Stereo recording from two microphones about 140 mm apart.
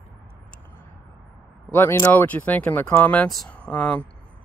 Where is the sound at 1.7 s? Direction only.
15° left (ahead or behind).